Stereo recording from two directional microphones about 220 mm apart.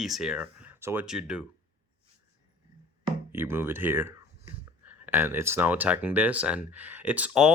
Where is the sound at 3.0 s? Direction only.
10° right (ahead or behind).